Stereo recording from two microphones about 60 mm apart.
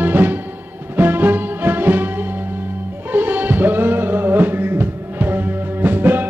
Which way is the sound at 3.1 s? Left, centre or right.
Right.